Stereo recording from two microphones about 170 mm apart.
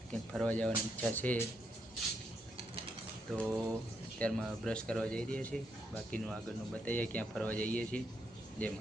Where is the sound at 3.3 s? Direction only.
Centre (ahead or behind).